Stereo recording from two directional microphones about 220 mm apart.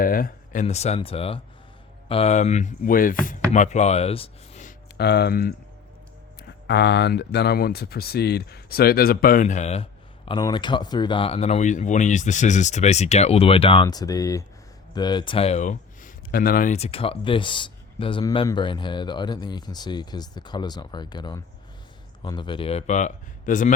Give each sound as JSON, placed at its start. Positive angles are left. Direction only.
{"t": 0.0, "sound": "speech", "side_deg": 40}
{"t": 4.9, "sound": "speech", "side_deg": 50}
{"t": 10.2, "sound": "speech", "side_deg": 20}